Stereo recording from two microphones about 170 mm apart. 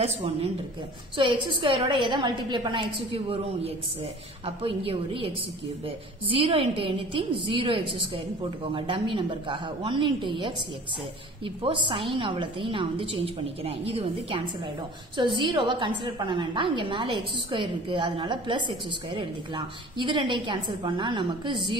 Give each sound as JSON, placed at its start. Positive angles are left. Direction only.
{"t": 0.0, "sound": "a woman's voice", "side_deg": -35}
{"t": 11.4, "sound": "a woman's voice", "side_deg": -30}